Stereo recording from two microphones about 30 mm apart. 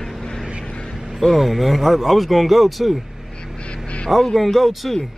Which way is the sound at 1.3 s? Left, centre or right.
Centre.